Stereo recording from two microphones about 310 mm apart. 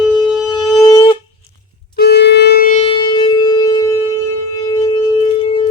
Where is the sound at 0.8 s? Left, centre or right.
Centre.